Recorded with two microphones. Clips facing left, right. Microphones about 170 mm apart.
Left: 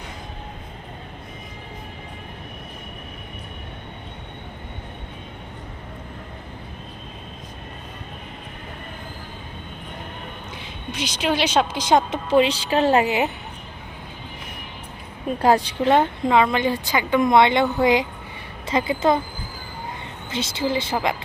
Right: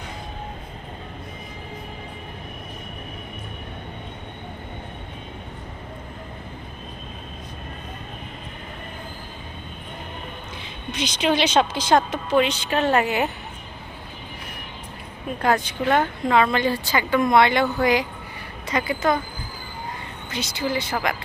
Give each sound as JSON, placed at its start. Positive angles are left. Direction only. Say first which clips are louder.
{"t": 10.9, "sound": "speech", "louder": "right 1 dB", "side_deg": 10}
{"t": 12.3, "sound": "a woman's voice", "louder": "left 3 dB", "side_deg": 30}
{"t": 15.4, "sound": "a woman's voice", "louder": "left 4 dB", "side_deg": 35}
{"t": 20.3, "sound": "a woman's voice", "louder": "left 2 dB", "side_deg": 25}